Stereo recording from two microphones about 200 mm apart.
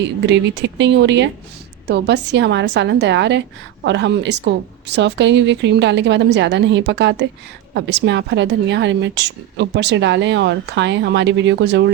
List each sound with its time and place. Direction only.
0.3 s a woman's voice: 60° right (ahead or behind)